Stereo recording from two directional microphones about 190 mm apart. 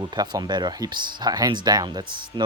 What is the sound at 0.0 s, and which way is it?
Speech, 20° right (ahead or behind).